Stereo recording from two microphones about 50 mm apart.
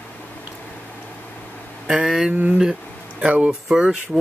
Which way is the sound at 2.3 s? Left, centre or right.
Right.